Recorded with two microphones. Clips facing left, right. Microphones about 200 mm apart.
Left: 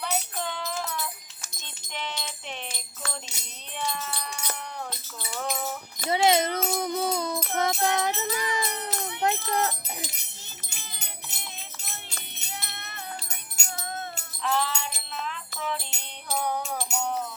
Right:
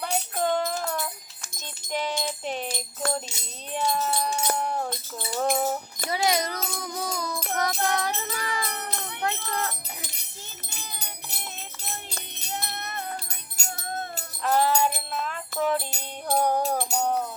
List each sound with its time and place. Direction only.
0.0 s jingle bell: 45° right (ahead or behind)
1.5 s music: 40° right (ahead or behind)
3.7 s wind chime: 45° right (ahead or behind)
6.2 s music: 25° left (ahead or behind)
9.2 s speech: 20° left (ahead or behind)
10.8 s music: 40° right (ahead or behind)